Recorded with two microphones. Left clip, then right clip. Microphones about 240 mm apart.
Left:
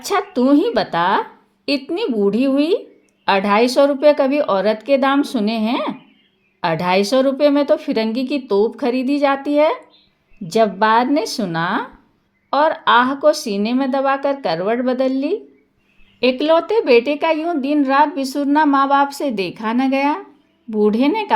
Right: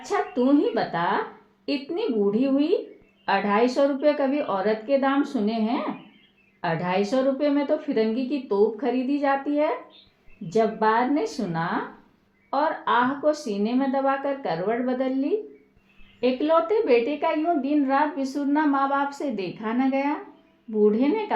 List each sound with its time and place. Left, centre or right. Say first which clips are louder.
0.0 s a woman's voice: left 6 dB; left